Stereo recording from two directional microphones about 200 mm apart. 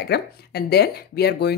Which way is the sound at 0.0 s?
55° left (ahead or behind).